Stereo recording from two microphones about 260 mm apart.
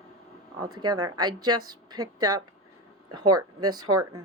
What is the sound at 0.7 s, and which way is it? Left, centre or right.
Speech, centre.